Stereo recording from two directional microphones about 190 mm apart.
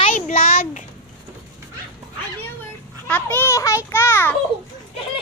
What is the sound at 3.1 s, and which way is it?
A child's voice, 10° left (ahead or behind).